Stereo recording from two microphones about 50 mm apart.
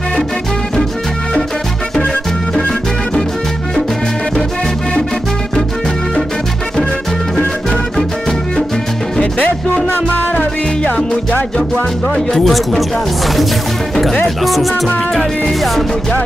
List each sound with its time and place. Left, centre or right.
10.3 s music: left
11.5 s music: centre
14.4 s music: centre